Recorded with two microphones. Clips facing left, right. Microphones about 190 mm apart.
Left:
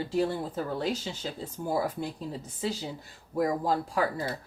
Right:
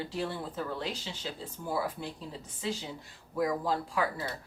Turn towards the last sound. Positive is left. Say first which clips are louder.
# left 3 dB
turn(degrees=40)  # may be behind; listen again after turning